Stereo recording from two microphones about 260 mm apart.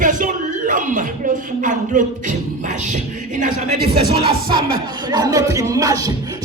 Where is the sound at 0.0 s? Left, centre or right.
Right.